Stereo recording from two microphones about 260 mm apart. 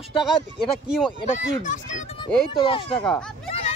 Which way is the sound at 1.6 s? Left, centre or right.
Left.